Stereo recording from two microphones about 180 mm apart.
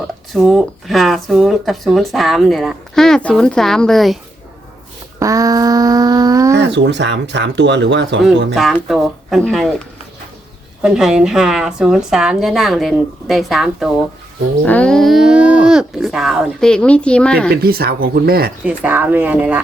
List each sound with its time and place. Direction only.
0.3 s speech: centre (ahead or behind)
5.2 s a sound: 20° right (ahead or behind)
6.7 s speech: 75° right (ahead or behind)
8.5 s speech: centre (ahead or behind)
10.8 s speech: 5° right (ahead or behind)
17.5 s speech: 60° right (ahead or behind)
18.6 s speech: 10° right (ahead or behind)